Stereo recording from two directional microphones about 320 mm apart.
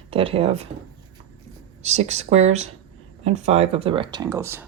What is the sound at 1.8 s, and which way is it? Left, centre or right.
Speech, centre.